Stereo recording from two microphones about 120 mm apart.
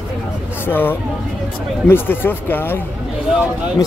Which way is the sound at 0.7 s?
15° left (ahead or behind).